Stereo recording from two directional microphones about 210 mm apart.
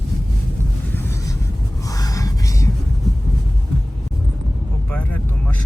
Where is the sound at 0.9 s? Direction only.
15° left (ahead or behind).